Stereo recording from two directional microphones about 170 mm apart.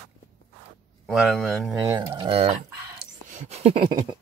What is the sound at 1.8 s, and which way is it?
Speech, 20° right (ahead or behind).